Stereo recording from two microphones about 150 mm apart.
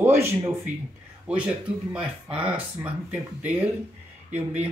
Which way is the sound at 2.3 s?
10° right (ahead or behind).